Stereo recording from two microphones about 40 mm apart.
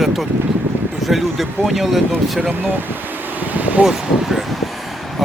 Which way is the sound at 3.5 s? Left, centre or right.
Right.